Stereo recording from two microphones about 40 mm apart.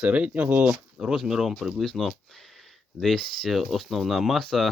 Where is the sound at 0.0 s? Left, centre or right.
Right.